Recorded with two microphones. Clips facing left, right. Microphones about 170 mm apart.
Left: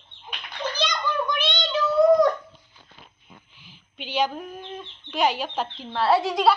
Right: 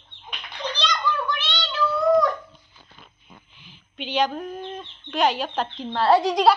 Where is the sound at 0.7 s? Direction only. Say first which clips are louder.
Right 1 dB; 10° left (ahead or behind).